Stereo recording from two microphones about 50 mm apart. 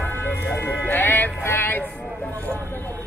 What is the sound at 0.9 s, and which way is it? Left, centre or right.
Music, left.